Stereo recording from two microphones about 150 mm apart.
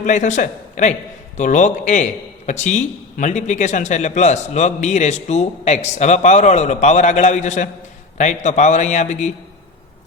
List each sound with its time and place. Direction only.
0.0 s a man's voice: 55° left (ahead or behind)